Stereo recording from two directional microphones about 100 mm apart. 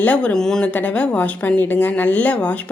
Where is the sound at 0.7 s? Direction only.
15° left (ahead or behind).